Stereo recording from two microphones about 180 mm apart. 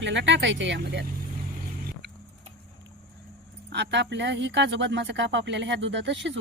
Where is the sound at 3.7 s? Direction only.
75° right (ahead or behind).